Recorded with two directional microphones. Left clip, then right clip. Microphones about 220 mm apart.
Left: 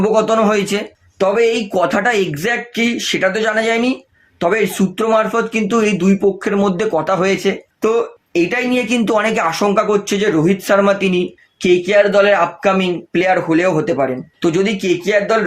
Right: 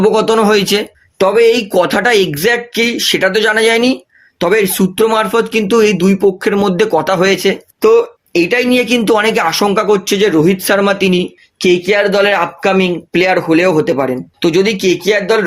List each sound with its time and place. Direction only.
0.0 s speech: 40° right (ahead or behind)